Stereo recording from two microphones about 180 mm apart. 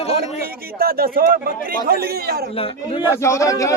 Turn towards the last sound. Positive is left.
turn(degrees=15)  # may be behind; listen again after turning